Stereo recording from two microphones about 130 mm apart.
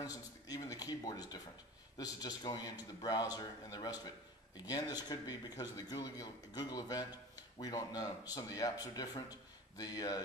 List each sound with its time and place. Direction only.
0.0 s a man's voice: 30° left (ahead or behind)